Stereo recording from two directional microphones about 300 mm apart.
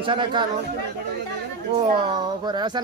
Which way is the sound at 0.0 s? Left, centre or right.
Centre.